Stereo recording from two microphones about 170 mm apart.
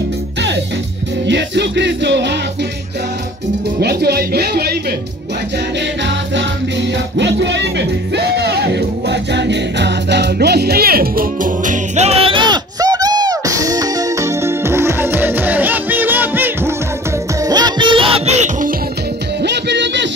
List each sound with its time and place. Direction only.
1.2 s music: 90° right
3.8 s speech: 65° right (ahead or behind)
7.2 s music: 90° right; by 16.7 s 10° right (ahead or behind)
17.5 s music: 25° right (ahead or behind); by 18.7 s 40° right (ahead or behind)
19.4 s music: 90° right